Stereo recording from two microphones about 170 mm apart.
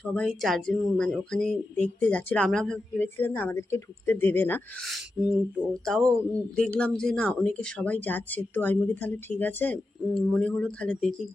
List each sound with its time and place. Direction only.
0.0 s speech: 5° left (ahead or behind)
4.9 s speech: 5° right (ahead or behind)